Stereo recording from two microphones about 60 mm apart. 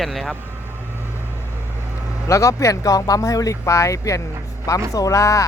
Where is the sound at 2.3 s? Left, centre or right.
Left.